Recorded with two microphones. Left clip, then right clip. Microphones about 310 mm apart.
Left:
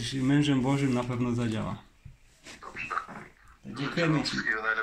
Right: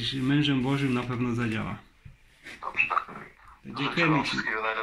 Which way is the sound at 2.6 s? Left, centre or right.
Centre.